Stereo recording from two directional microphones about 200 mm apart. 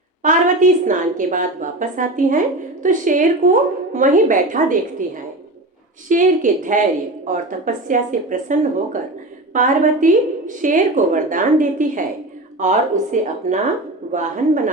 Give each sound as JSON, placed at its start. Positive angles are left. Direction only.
{"t": 0.2, "sound": "a woman's voice", "side_deg": -40}
{"t": 6.1, "sound": "a woman's voice", "side_deg": -40}